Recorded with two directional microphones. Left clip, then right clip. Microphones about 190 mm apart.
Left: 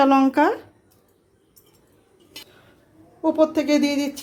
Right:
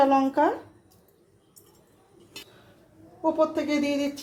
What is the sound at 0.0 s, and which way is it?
Speech, 40° left (ahead or behind).